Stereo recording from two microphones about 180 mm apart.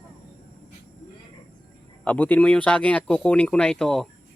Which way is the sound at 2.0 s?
10° left (ahead or behind).